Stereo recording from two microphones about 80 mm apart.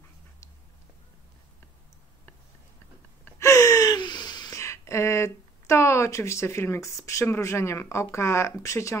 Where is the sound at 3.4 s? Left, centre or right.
Left.